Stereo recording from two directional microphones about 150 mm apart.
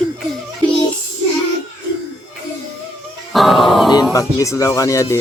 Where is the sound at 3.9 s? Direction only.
25° left (ahead or behind).